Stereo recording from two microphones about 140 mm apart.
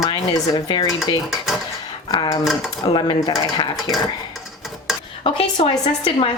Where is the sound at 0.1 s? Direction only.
30° left (ahead or behind).